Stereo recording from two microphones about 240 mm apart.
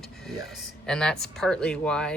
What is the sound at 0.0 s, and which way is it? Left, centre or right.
Speech, centre.